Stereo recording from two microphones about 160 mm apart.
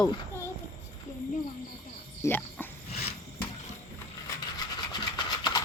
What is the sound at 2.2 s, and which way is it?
Cricket, 10° left (ahead or behind).